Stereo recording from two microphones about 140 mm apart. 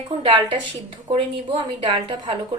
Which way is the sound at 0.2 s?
40° right (ahead or behind).